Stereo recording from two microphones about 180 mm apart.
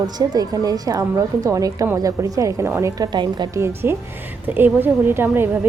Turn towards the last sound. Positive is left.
turn(degrees=-10)  # may be behind; listen again after turning